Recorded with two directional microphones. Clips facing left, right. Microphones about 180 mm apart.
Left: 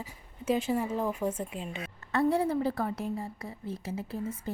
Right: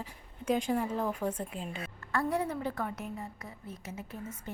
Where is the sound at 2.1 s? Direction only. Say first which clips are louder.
Left 5 dB; 25° left (ahead or behind).